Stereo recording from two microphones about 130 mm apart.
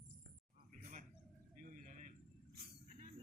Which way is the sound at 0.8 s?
90° right.